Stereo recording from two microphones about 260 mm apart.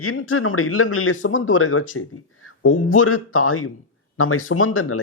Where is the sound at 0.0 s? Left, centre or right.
Left.